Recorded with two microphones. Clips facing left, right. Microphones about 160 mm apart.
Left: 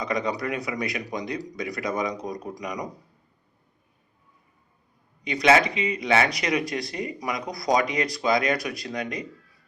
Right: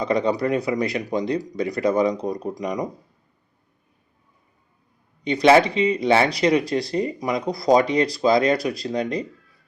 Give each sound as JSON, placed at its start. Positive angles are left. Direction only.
{"t": 0.0, "sound": "speech", "side_deg": -30}
{"t": 5.2, "sound": "speech", "side_deg": -30}